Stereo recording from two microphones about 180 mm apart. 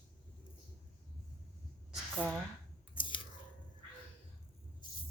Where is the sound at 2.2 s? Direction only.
5° right (ahead or behind).